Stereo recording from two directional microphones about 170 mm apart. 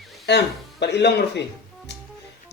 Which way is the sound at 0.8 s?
80° left.